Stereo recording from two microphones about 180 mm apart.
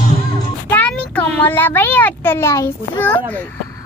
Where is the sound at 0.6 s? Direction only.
10° left (ahead or behind).